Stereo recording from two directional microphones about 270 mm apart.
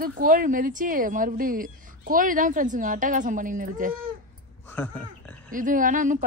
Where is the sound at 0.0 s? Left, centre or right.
Right.